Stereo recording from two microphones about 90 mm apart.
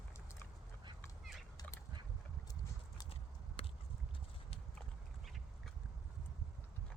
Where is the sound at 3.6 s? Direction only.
90° left.